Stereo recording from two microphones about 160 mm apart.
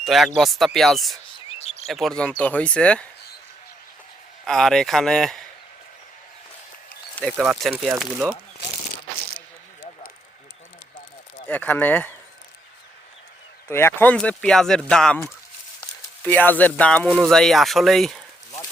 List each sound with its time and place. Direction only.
0.0 s speech: centre (ahead or behind)
1.5 s a sound: 40° left (ahead or behind)
1.9 s speech: centre (ahead or behind)
4.4 s speech: 5° left (ahead or behind)
7.2 s speech: 10° left (ahead or behind)
7.4 s speech: 5° right (ahead or behind)
11.4 s speech: 10° left (ahead or behind)
13.7 s speech: 15° left (ahead or behind)